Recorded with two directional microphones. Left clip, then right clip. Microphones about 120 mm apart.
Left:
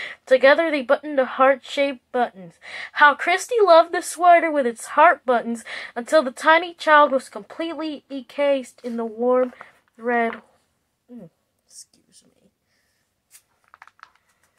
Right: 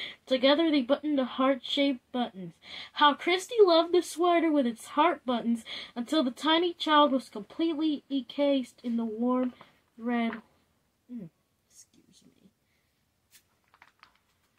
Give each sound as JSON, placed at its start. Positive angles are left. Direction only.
{"t": 0.0, "sound": "a woman's voice", "side_deg": -25}
{"t": 7.9, "sound": "speech", "side_deg": 20}
{"t": 8.3, "sound": "a woman's voice", "side_deg": -25}